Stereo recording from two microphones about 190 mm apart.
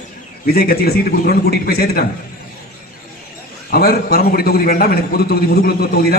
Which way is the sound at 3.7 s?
55° left (ahead or behind).